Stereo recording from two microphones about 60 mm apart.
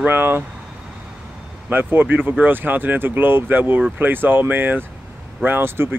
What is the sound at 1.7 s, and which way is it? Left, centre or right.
Speech, right.